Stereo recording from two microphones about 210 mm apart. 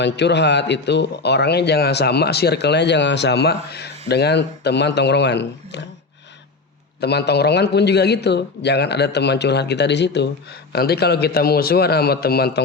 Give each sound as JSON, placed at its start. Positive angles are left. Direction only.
{"t": 0.0, "sound": "speech", "side_deg": 55}
{"t": 7.0, "sound": "speech", "side_deg": 50}